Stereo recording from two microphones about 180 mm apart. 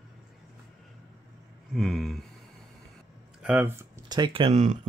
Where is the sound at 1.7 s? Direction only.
Centre (ahead or behind).